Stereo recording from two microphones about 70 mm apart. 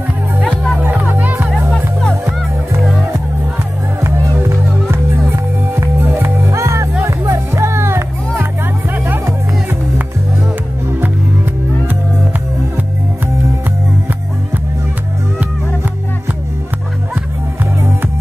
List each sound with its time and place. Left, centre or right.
0.4 s music: centre
0.7 s music: right
1.5 s music: centre
4.0 s music: right